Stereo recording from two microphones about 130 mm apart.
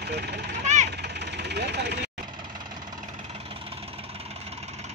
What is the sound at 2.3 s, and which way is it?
Vehicle, 35° right (ahead or behind).